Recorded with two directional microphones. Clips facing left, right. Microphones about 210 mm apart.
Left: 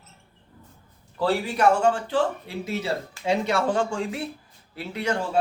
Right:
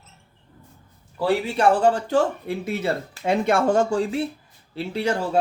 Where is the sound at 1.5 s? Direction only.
35° right (ahead or behind).